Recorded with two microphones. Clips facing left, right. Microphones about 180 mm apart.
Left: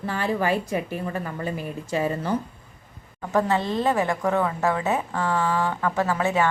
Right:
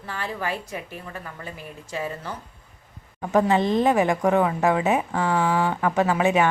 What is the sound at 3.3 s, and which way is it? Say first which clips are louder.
Speech: right 3 dB; 15° right (ahead or behind).